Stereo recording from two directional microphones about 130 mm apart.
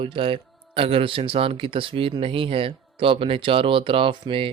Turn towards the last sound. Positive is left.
turn(degrees=-40)  # may be behind; listen again after turning